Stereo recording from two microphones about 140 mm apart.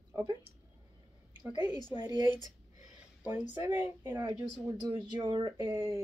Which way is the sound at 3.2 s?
10° right (ahead or behind).